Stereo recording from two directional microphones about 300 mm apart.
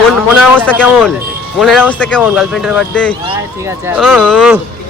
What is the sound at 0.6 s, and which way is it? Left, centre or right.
Speech, centre.